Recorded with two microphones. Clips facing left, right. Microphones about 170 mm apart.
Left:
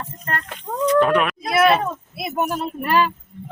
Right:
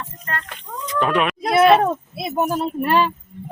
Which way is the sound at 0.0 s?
45° left (ahead or behind).